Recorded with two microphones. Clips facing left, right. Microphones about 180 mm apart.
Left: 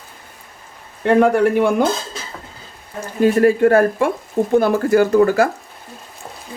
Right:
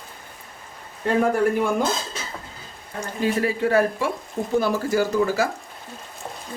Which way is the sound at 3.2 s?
50° left (ahead or behind).